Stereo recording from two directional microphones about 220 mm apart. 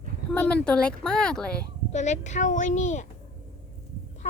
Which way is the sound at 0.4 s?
5° left (ahead or behind).